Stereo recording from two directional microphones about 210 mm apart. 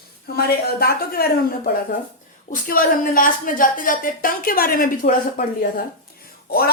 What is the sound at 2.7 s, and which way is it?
A woman's voice, 40° left (ahead or behind).